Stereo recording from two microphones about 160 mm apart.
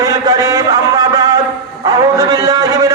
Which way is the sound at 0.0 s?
25° right (ahead or behind).